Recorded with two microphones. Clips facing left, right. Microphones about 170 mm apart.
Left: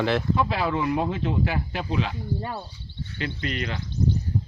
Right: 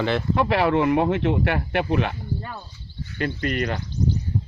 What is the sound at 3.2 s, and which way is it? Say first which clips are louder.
Speech: right 5 dB; 50° right (ahead or behind).